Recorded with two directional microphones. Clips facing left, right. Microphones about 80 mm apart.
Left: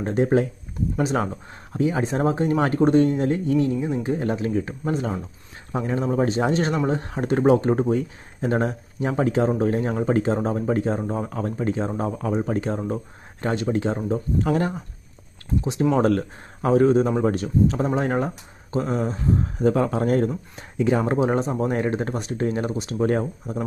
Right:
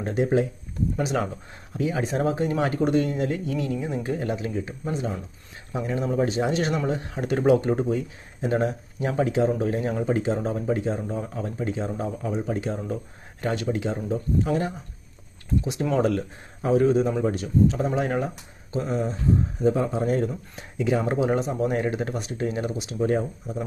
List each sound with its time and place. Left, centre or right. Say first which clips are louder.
0.0 s speech: left 3 dB; left
3.8 s speech: left 4 dB; left
4.2 s speech: left 4 dB; left
15.6 s speech: left 6 dB; left
16.0 s speech: left 3 dB; left
19.5 s speech: left 5 dB; left